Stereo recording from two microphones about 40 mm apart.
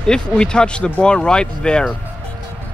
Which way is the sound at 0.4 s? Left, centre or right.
Left.